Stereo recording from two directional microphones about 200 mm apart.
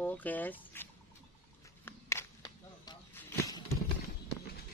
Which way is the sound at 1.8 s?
15° left (ahead or behind).